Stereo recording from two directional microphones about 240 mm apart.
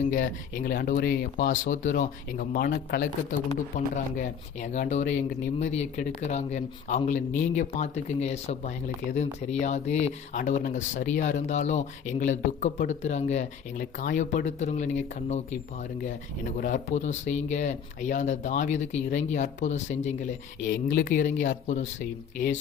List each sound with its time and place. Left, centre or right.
0.1 s speech: left
16.6 s speech: left